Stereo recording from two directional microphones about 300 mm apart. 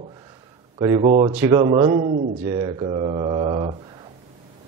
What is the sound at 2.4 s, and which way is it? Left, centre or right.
A man's voice, centre.